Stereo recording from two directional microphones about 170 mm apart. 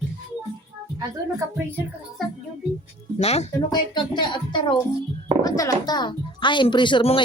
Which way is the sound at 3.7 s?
25° left (ahead or behind).